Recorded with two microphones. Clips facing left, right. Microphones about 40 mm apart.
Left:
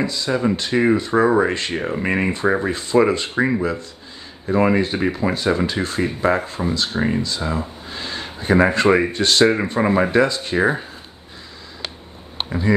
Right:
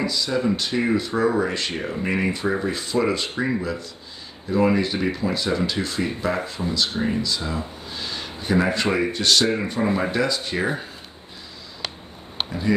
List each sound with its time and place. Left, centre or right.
0.0 s speech: left